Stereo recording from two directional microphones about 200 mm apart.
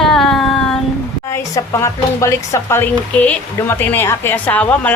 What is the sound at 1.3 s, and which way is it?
Speech, 15° left (ahead or behind).